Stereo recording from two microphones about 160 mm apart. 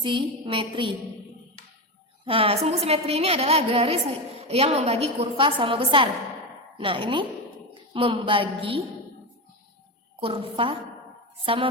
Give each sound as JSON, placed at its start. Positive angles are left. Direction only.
{"t": 0.0, "sound": "a woman's voice", "side_deg": -30}
{"t": 2.2, "sound": "a woman's voice", "side_deg": -35}
{"t": 10.2, "sound": "a woman's voice", "side_deg": -35}